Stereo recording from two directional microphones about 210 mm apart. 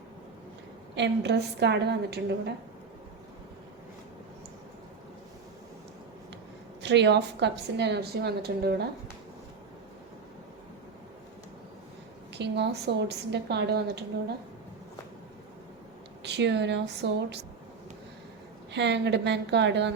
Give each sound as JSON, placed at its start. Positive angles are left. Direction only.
{"t": 0.9, "sound": "a woman's voice", "side_deg": -55}
{"t": 6.8, "sound": "a woman's voice", "side_deg": -55}
{"t": 12.3, "sound": "a woman's voice", "side_deg": -55}
{"t": 16.2, "sound": "a woman's voice", "side_deg": -55}
{"t": 18.7, "sound": "a woman's voice", "side_deg": -55}